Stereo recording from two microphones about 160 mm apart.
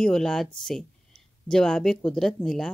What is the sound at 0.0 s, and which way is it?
Speech, 5° left (ahead or behind).